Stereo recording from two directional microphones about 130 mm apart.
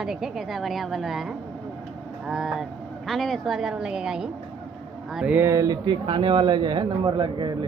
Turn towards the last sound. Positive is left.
turn(degrees=-35)  # may be behind; listen again after turning